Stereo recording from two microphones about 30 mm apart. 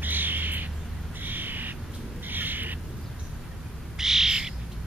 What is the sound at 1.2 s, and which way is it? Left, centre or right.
Bird, right.